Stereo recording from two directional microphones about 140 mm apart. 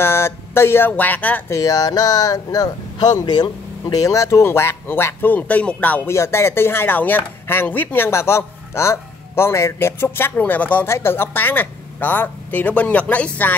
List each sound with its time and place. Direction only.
0.0 s speech: 15° left (ahead or behind)
1.6 s speech: 25° left (ahead or behind)